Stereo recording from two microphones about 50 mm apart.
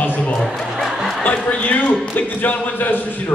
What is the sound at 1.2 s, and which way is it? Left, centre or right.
A man's voice, left.